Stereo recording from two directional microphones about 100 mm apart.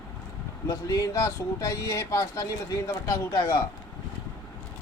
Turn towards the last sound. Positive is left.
turn(degrees=30)  # may be behind; listen again after turning